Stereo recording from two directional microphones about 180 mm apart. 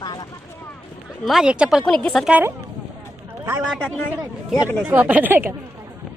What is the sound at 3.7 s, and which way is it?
Speech, 10° left (ahead or behind).